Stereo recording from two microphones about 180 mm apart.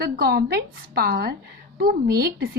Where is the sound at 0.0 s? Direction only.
60° right (ahead or behind).